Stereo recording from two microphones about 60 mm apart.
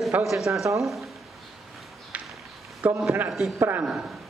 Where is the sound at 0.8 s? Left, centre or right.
Centre.